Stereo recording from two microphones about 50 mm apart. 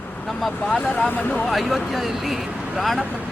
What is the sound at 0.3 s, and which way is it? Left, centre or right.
Speech, centre.